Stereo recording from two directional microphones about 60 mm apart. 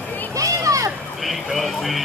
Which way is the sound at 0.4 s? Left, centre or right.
Right.